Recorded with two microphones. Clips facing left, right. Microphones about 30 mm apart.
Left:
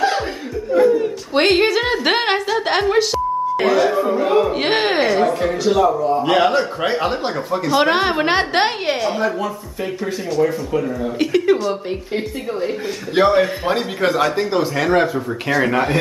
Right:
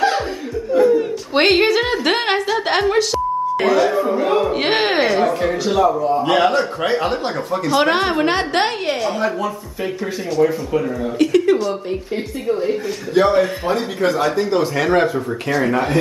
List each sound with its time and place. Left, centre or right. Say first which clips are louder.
0.7 s a sound: even; centre
1.3 s a woman's voice: right 1 dB; centre
10.3 s speech: right 2 dB; centre
11.1 s speech: right 2 dB; centre
13.2 s a man's voice: left 1 dB; centre
14.4 s speech: right 1 dB; centre